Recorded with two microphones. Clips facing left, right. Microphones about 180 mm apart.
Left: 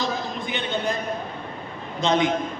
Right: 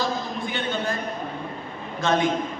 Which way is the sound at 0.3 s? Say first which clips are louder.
Even; 20° left (ahead or behind).